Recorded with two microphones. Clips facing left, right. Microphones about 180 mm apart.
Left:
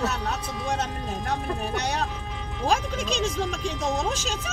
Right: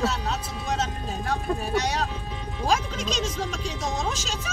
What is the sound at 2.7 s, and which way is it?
Speech, 55° left (ahead or behind).